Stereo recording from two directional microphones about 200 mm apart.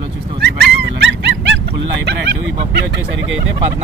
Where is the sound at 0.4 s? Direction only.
60° right (ahead or behind).